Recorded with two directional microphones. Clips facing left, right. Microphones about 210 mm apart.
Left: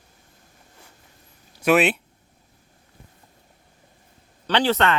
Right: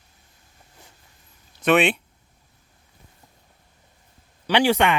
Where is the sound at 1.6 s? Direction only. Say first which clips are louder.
Even; 5° left (ahead or behind).